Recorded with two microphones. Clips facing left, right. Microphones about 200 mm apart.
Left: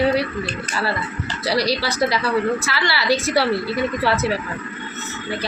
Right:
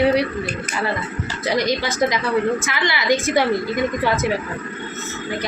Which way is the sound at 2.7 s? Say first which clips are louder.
Right 1 dB; 15° right (ahead or behind).